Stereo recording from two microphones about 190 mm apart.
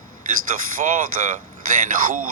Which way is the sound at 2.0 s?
45° right (ahead or behind).